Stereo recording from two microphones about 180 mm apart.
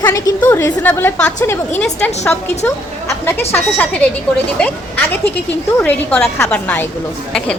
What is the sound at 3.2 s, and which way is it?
A woman's voice, 10° left (ahead or behind).